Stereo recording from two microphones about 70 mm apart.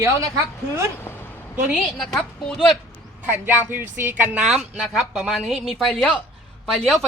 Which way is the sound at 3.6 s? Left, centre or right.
Right.